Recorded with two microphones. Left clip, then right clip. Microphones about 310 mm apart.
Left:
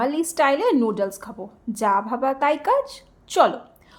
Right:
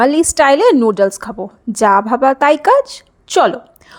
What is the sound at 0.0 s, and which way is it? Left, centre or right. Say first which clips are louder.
A woman's voice: right 10 dB; right.